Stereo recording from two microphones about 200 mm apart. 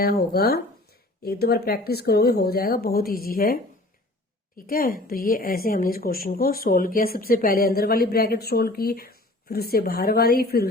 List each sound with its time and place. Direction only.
0.0 s a woman's voice: 50° left (ahead or behind)